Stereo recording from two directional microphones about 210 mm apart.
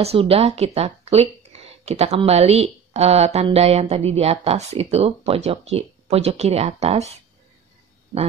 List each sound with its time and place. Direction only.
0.0 s speech: 30° right (ahead or behind)